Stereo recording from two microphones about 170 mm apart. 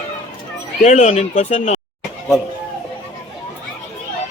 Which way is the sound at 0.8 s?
40° left (ahead or behind).